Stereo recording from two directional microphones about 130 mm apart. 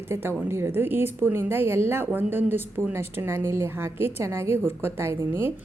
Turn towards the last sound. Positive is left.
turn(degrees=-20)  # may be behind; listen again after turning